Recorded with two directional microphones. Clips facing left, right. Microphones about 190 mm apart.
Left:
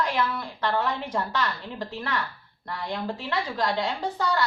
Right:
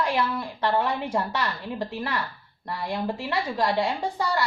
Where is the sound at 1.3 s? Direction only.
10° right (ahead or behind).